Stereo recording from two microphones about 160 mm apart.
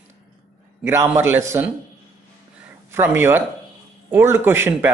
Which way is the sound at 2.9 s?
15° right (ahead or behind).